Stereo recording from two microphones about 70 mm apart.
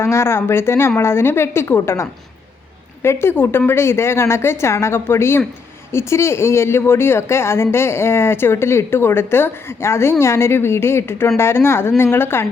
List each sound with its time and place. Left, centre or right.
0.0 s speech: left